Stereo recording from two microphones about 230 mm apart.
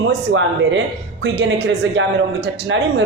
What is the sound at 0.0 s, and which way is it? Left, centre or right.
A man's voice, right.